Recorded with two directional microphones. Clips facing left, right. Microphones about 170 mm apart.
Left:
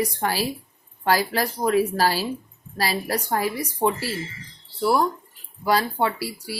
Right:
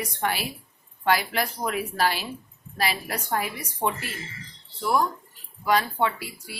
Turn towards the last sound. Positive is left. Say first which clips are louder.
# left 2 dB
turn(degrees=35)  # may be behind; listen again after turning